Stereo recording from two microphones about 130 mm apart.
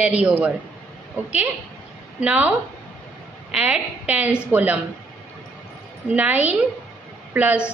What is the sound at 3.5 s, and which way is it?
A woman's voice, 10° right (ahead or behind).